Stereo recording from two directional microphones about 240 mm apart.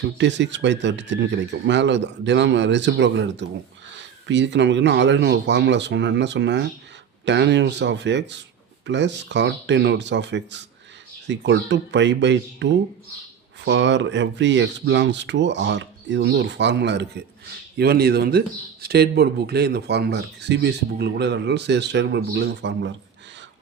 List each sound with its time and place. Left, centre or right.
0.0 s speech: right
13.7 s speech: right